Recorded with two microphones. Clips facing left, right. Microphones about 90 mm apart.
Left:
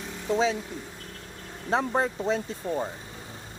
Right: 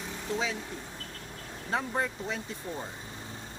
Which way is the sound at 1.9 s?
35° left (ahead or behind).